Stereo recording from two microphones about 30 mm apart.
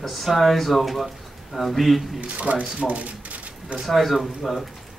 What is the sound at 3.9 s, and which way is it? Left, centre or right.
Speech, centre.